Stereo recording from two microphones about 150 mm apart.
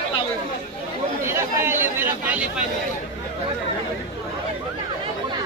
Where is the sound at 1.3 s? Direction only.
15° right (ahead or behind).